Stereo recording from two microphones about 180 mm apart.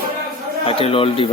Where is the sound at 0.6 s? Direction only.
30° left (ahead or behind).